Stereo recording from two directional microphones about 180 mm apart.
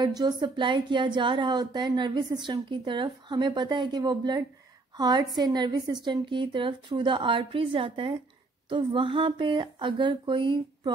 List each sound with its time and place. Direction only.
0.0 s a woman's voice: 25° right (ahead or behind)